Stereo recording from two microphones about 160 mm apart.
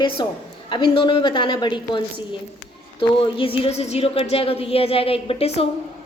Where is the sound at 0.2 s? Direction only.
30° left (ahead or behind).